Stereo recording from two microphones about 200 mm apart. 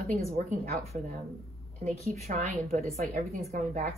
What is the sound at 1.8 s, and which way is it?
A woman's voice, 40° right (ahead or behind).